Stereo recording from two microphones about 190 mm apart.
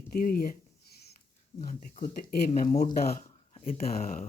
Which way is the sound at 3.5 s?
30° left (ahead or behind).